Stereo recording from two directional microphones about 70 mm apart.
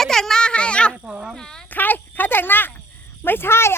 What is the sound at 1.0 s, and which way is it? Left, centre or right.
Speech, centre.